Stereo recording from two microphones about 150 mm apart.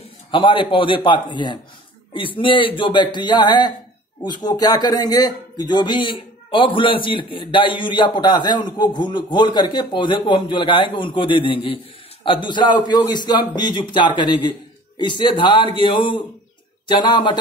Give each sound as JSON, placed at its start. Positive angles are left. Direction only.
{"t": 0.3, "sound": "a man's voice", "side_deg": 35}